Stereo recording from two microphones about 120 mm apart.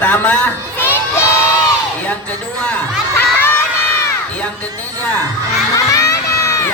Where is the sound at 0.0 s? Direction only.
15° left (ahead or behind).